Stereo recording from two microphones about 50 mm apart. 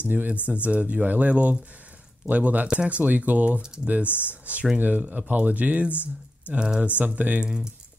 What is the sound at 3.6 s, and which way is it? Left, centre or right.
Speech, centre.